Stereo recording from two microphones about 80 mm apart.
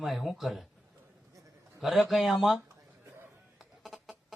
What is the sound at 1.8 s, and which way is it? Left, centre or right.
Speech, centre.